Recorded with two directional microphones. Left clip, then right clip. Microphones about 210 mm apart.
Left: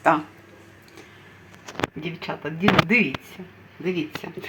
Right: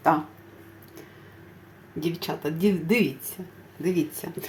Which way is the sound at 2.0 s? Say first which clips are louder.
Right 2 dB; 20° right (ahead or behind).